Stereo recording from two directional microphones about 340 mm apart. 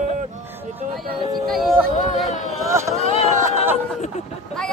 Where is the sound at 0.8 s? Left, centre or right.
Right.